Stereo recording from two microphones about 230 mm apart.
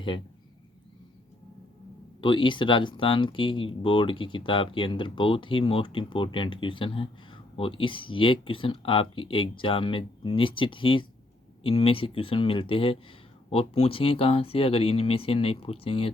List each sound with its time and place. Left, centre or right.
2.2 s speech: left